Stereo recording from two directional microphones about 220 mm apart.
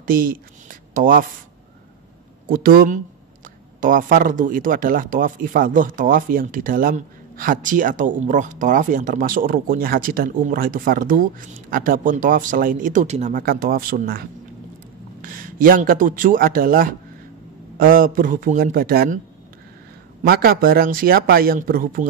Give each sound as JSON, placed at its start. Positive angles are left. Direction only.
{"t": 0.0, "sound": "a sound", "side_deg": -40}
{"t": 2.4, "sound": "speech", "side_deg": -40}
{"t": 15.2, "sound": "a man's voice", "side_deg": -40}
{"t": 20.2, "sound": "speech", "side_deg": -45}